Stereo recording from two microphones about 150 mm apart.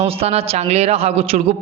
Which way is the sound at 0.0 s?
40° right (ahead or behind).